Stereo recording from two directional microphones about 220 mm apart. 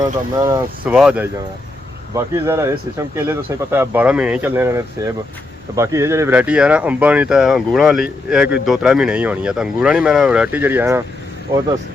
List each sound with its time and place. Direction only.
0.0 s speech: 15° right (ahead or behind)